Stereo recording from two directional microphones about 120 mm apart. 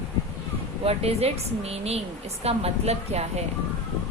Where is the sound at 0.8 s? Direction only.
55° right (ahead or behind).